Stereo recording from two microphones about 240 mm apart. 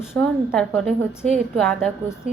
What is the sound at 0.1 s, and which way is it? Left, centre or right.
A woman's voice, centre.